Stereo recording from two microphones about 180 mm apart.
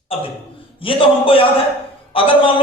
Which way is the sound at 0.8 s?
30° left (ahead or behind).